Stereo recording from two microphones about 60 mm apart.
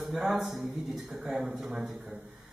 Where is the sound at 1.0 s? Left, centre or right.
Right.